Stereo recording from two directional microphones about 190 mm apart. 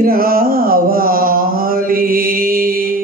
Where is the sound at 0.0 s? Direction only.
50° right (ahead or behind).